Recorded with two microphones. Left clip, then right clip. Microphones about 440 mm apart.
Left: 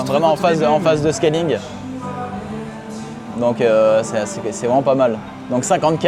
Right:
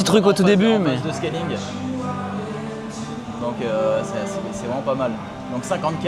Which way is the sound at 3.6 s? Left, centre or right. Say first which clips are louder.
Left 9 dB; left.